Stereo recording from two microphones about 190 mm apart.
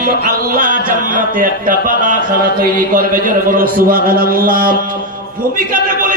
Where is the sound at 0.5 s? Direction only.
45° right (ahead or behind).